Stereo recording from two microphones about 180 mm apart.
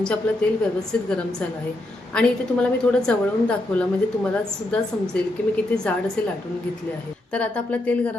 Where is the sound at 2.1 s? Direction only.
5° left (ahead or behind).